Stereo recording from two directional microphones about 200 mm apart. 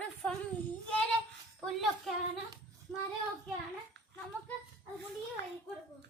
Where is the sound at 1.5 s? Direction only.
Centre (ahead or behind).